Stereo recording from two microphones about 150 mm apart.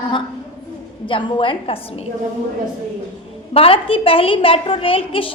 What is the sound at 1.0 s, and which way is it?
Speech, 35° left (ahead or behind).